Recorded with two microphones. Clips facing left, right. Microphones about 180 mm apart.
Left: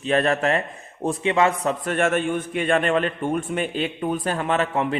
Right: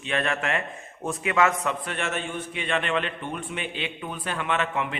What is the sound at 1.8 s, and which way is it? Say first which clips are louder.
A man's voice: left 9 dB; 50° left (ahead or behind).